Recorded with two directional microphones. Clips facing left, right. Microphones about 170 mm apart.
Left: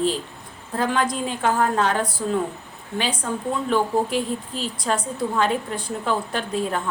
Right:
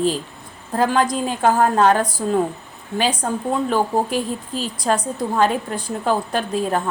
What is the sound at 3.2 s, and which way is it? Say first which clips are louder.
A woman's voice: right 3 dB; 40° right (ahead or behind).